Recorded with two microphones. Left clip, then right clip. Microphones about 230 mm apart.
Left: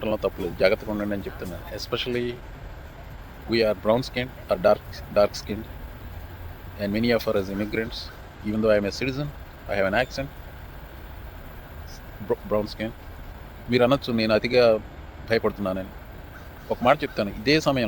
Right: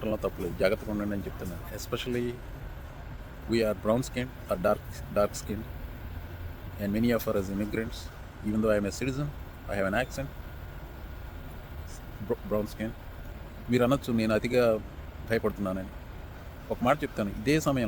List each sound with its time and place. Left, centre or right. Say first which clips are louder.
0.0 s speech: left 6 dB; centre
3.5 s speech: left 6 dB; centre
6.7 s speech: left 5 dB; centre
12.3 s speech: left 6 dB; centre